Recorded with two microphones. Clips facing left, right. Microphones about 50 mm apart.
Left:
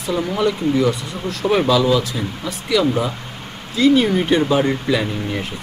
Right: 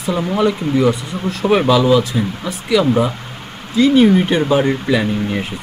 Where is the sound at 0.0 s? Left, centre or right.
Centre.